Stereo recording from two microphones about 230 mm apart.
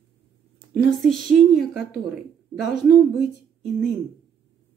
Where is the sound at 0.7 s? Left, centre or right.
Centre.